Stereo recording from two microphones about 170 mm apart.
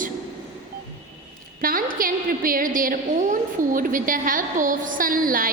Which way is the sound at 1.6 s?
55° right (ahead or behind).